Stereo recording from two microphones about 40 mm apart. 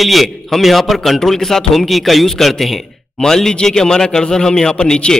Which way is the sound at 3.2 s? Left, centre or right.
Centre.